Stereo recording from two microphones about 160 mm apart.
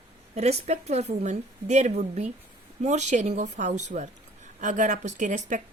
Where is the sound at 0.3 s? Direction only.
45° right (ahead or behind).